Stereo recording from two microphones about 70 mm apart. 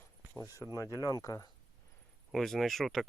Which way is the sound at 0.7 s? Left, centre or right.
Left.